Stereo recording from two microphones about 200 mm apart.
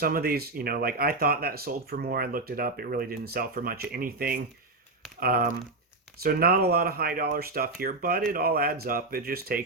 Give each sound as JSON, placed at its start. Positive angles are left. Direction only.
{"t": 0.0, "sound": "speech", "side_deg": -50}